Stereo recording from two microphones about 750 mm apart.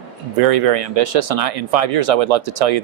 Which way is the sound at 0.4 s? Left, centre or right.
Right.